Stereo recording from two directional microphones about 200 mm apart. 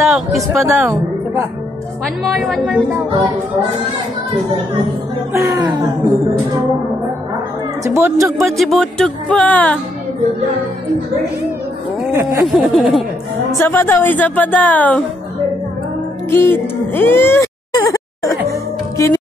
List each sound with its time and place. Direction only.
0.0 s music: centre (ahead or behind)
0.7 s a woman's voice: 10° right (ahead or behind)
2.2 s music: centre (ahead or behind)
5.3 s speech: 15° right (ahead or behind)
7.8 s speech: 15° right (ahead or behind)
8.4 s music: centre (ahead or behind)
12.1 s speech: 10° right (ahead or behind)
12.4 s music: centre (ahead or behind)
13.7 s speech: 10° left (ahead or behind)
16.3 s music: 10° left (ahead or behind)